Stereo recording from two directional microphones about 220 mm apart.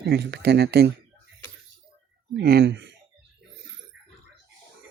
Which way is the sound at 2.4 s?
45° right (ahead or behind).